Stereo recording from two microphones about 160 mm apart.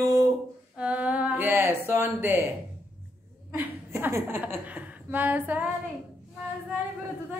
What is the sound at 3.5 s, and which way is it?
A woman's voice, 10° right (ahead or behind).